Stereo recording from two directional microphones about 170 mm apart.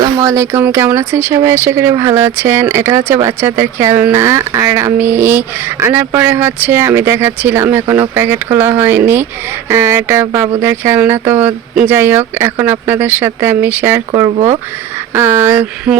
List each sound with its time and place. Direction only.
0.0 s speech: 20° right (ahead or behind)
14.3 s speech: 35° right (ahead or behind)
15.1 s speech: 15° right (ahead or behind)